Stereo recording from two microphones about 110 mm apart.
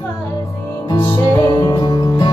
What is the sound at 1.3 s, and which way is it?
Music, 35° left (ahead or behind).